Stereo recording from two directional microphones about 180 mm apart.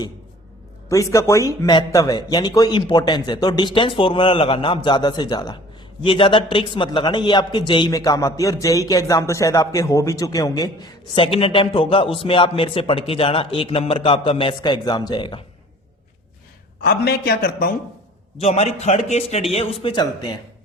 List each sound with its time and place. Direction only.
0.9 s a man's voice: 15° left (ahead or behind)
16.8 s a man's voice: 60° left (ahead or behind)
18.3 s a man's voice: 35° left (ahead or behind)